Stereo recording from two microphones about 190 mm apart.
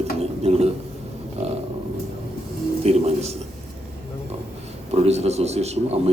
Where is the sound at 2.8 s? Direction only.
35° right (ahead or behind).